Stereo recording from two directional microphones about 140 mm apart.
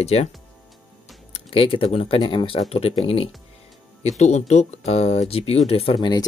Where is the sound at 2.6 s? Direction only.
45° left (ahead or behind).